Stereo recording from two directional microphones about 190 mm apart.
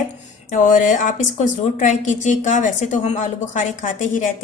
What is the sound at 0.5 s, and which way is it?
A woman's voice, 40° left (ahead or behind).